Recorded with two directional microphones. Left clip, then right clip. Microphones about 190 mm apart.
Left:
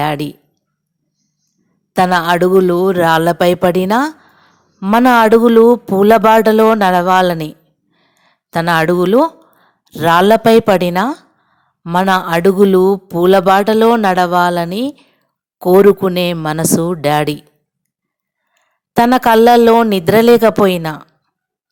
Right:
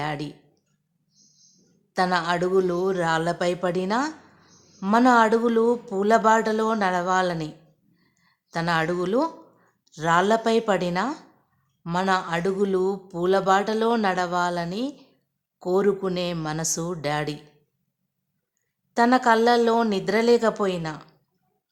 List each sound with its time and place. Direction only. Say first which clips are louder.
0.0 s speech: left 13 dB; 40° left (ahead or behind)
1.9 s speech: left 11 dB; 40° left (ahead or behind)
18.5 s speech: left 11 dB; 40° left (ahead or behind)